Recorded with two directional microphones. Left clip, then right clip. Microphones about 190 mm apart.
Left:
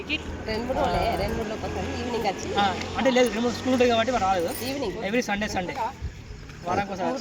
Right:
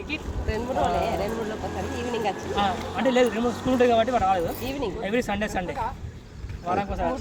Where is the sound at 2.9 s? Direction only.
5° right (ahead or behind).